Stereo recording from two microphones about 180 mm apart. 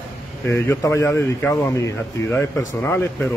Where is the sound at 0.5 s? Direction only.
15° left (ahead or behind).